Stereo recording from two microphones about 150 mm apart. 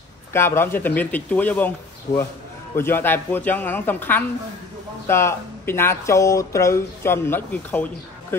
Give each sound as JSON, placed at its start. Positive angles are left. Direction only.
{"t": 0.3, "sound": "speech", "side_deg": 15}
{"t": 2.7, "sound": "speech", "side_deg": 15}